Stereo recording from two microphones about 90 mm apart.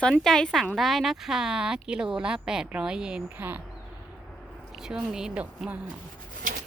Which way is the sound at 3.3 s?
20° right (ahead or behind).